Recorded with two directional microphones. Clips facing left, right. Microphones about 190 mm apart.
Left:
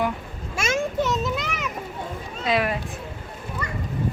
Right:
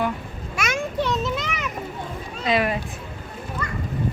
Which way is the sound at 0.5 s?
25° left (ahead or behind).